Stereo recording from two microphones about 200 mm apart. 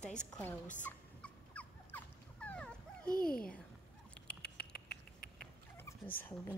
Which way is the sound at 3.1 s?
45° left (ahead or behind).